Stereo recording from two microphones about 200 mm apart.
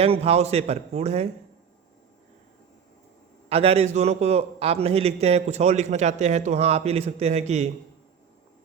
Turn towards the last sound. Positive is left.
turn(degrees=-35)  # may be behind; listen again after turning